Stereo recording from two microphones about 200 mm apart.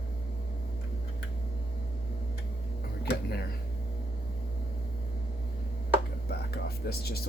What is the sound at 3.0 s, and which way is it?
Speech, 55° left (ahead or behind).